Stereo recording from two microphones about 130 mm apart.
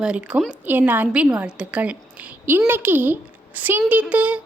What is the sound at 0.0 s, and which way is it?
A woman's voice, 10° right (ahead or behind).